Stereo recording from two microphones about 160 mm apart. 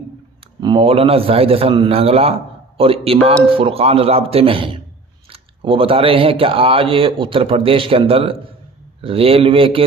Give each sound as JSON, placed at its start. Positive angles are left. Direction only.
{"t": 0.6, "sound": "speech", "side_deg": -30}